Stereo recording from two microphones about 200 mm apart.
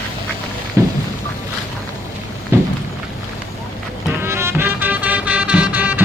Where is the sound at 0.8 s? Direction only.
15° right (ahead or behind).